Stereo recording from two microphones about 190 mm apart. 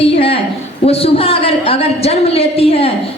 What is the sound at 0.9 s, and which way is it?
A woman's voice, 30° left (ahead or behind).